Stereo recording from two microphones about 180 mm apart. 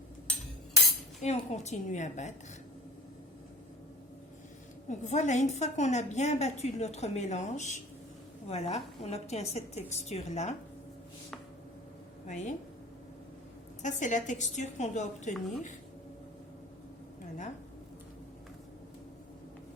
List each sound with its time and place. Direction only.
1.2 s a woman's voice: 40° left (ahead or behind)
4.9 s a woman's voice: 40° left (ahead or behind)
12.2 s a woman's voice: 45° left (ahead or behind)
13.8 s a woman's voice: 45° left (ahead or behind)